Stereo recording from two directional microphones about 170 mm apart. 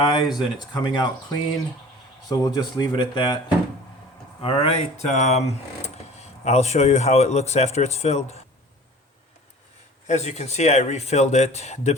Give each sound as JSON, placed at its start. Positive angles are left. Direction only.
{"t": 0.0, "sound": "speech", "side_deg": 30}
{"t": 4.4, "sound": "speech", "side_deg": 35}
{"t": 10.1, "sound": "speech", "side_deg": 40}